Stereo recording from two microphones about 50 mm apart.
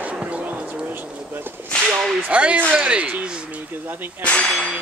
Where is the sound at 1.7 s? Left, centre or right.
Centre.